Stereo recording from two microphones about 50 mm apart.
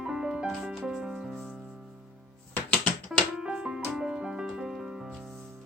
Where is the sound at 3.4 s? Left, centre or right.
Centre.